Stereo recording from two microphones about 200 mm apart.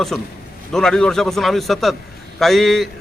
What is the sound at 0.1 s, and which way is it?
A man's voice, centre (ahead or behind).